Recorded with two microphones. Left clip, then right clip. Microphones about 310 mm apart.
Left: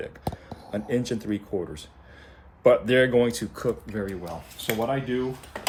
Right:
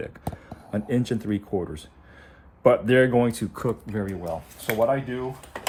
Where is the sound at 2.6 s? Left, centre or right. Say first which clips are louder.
Right 1 dB; centre.